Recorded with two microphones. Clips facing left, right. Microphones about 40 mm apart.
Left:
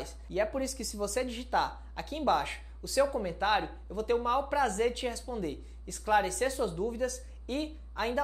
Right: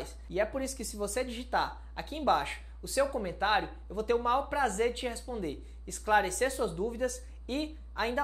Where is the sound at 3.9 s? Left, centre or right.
Right.